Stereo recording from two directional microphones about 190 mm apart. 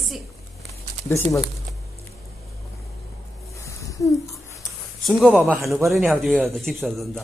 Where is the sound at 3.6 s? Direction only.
15° left (ahead or behind).